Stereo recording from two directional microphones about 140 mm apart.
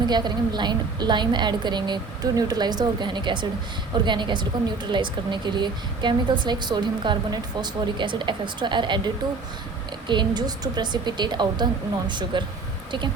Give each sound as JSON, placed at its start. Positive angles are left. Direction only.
{"t": 0.1, "sound": "a woman's voice", "side_deg": -30}
{"t": 10.1, "sound": "a woman's voice", "side_deg": -30}